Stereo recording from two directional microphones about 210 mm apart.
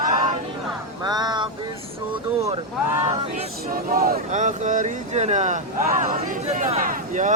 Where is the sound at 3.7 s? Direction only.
45° right (ahead or behind).